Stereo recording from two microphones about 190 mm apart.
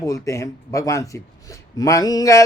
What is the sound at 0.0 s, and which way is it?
A man's voice, 15° left (ahead or behind).